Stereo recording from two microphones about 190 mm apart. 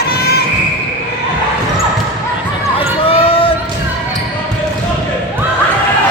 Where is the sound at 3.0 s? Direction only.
30° left (ahead or behind).